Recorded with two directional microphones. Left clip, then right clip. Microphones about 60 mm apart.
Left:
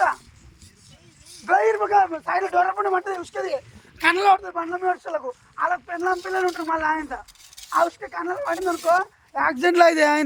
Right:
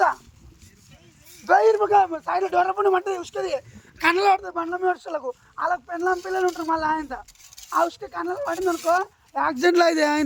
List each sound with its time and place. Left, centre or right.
1.5 s a sound: centre
1.7 s speech: centre
2.4 s a man's voice: left
3.2 s speech: left
4.0 s a man's voice: left
4.4 s speech: left
5.5 s speech: left
6.4 s speech: centre
6.7 s speech: left
8.1 s speech: left
8.4 s speech: centre
9.3 s speech: left
9.7 s speech: left